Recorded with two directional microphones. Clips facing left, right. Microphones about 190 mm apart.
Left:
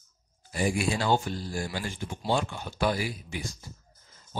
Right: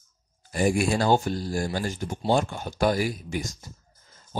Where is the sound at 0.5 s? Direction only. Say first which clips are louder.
Right 5 dB; 50° right (ahead or behind).